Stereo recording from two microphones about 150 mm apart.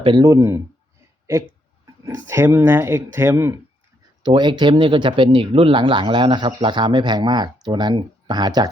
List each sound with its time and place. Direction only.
0.0 s speech: 30° right (ahead or behind)
0.3 s speech: 20° right (ahead or behind)
2.0 s speech: 20° right (ahead or behind)
4.2 s speech: 30° right (ahead or behind)